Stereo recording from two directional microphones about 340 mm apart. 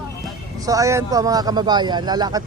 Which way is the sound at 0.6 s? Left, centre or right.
Centre.